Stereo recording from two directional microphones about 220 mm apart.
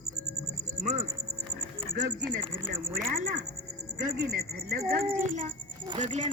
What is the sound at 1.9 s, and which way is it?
Speech, 40° right (ahead or behind).